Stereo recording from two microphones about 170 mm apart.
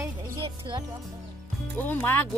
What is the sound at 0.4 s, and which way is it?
Music, 30° right (ahead or behind).